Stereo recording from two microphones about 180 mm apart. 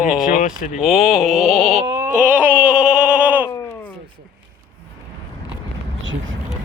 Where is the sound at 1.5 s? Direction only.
35° right (ahead or behind).